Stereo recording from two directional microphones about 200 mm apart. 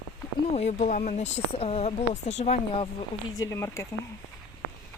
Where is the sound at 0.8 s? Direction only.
40° left (ahead or behind).